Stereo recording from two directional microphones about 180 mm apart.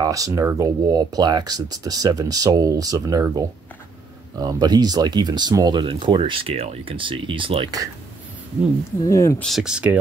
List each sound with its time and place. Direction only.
0.0 s speech: 20° right (ahead or behind)
4.4 s speech: 20° right (ahead or behind)
9.0 s speech: 15° left (ahead or behind)
9.4 s speech: centre (ahead or behind)